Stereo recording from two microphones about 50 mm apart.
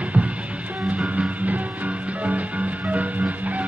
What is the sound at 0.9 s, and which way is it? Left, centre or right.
Music, right.